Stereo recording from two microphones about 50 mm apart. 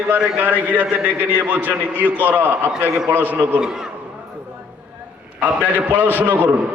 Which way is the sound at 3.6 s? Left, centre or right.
Centre.